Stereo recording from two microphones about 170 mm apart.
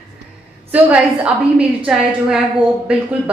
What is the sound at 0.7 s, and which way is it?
A woman's voice, 10° right (ahead or behind).